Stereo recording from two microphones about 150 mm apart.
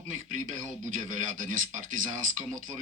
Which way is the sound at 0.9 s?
60° right (ahead or behind).